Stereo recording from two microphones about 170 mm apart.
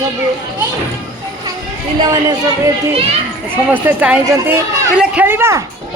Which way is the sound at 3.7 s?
10° right (ahead or behind).